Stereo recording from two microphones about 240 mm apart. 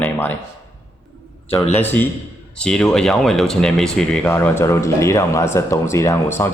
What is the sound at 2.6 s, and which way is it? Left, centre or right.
Speech, centre.